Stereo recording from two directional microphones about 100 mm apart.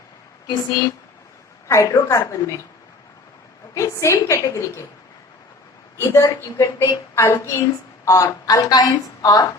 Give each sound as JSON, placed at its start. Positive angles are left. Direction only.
{"t": 1.6, "sound": "a woman's voice", "side_deg": 30}
{"t": 3.8, "sound": "a woman's voice", "side_deg": 30}
{"t": 6.0, "sound": "a woman's voice", "side_deg": 30}